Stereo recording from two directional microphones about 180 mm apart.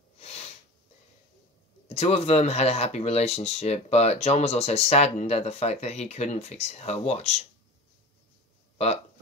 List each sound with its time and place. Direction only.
0.2 s sniff: 35° left (ahead or behind)
1.9 s speech: 35° left (ahead or behind)
8.7 s speech: 35° left (ahead or behind)